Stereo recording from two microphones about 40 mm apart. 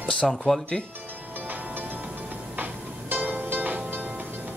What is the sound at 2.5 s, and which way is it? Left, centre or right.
Music, right.